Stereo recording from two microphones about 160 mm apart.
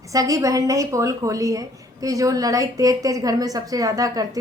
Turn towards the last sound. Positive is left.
turn(degrees=-20)  # may be behind; listen again after turning